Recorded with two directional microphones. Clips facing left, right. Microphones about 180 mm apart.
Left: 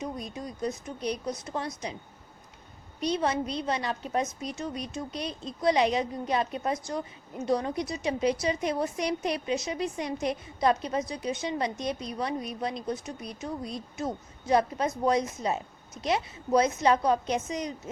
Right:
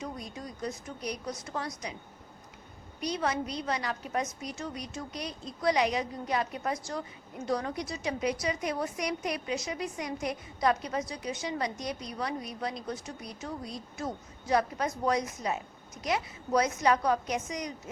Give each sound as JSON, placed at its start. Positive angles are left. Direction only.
{"t": 0.0, "sound": "a woman's voice", "side_deg": 20}
{"t": 3.0, "sound": "a woman's voice", "side_deg": 25}